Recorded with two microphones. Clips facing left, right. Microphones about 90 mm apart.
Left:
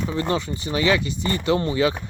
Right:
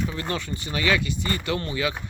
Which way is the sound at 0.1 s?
25° left (ahead or behind).